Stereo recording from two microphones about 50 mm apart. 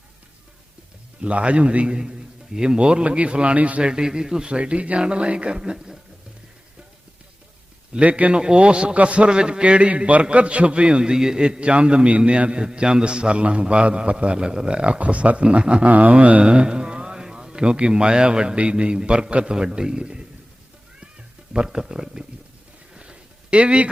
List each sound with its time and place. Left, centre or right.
1.2 s a man's voice: right
7.9 s a man's voice: right
21.5 s speech: centre
23.0 s a sound: centre